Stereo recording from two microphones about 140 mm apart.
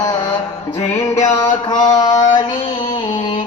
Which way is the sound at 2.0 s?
25° left (ahead or behind).